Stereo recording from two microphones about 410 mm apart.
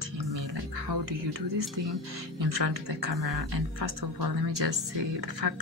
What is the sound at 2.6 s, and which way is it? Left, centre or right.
Speech, right.